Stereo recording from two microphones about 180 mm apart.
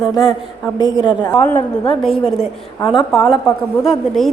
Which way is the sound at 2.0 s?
Centre (ahead or behind).